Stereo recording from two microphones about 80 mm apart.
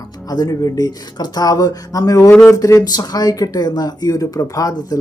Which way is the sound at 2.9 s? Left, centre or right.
Left.